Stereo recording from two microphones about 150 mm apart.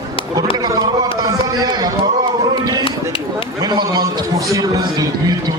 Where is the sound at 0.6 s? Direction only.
25° right (ahead or behind).